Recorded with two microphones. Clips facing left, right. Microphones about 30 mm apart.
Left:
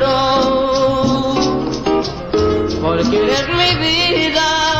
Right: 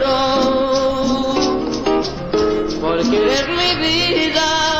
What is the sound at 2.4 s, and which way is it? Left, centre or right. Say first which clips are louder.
Music: left 2 dB; left.